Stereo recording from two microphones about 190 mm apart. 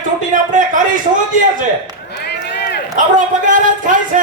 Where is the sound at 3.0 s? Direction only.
40° right (ahead or behind).